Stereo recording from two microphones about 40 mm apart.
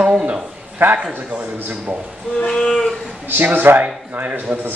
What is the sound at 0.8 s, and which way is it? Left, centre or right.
Speech, right.